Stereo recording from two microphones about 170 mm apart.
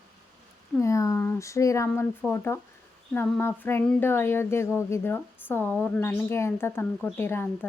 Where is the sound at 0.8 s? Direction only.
15° left (ahead or behind).